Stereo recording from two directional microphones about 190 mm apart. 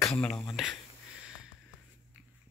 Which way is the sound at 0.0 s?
5° left (ahead or behind).